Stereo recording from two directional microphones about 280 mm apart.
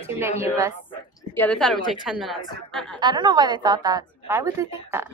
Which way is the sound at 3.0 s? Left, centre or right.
Centre.